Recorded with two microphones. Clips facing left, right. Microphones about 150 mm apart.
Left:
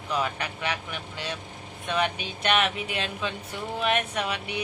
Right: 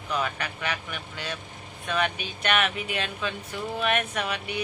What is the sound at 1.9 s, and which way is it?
Speech, 25° left (ahead or behind).